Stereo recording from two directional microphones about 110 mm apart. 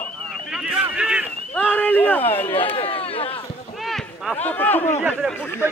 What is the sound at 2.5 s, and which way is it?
Speech, 55° left (ahead or behind).